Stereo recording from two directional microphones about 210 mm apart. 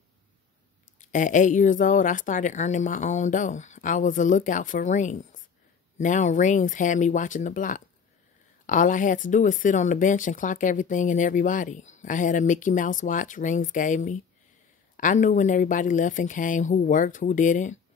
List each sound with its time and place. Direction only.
0.9 s speech: 35° left (ahead or behind)